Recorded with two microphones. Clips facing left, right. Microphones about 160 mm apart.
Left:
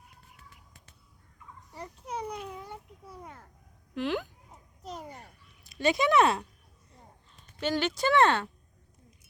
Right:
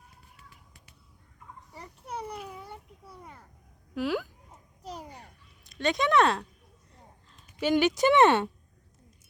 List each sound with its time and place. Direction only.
1.8 s children playing: 5° right (ahead or behind)
3.9 s speech: 5° right (ahead or behind)
5.6 s speech: 5° left (ahead or behind)
7.6 s speech: 15° right (ahead or behind)